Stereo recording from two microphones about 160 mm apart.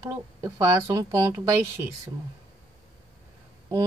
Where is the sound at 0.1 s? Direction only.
15° right (ahead or behind).